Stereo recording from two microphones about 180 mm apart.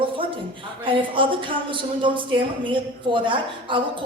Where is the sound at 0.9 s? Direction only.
30° right (ahead or behind).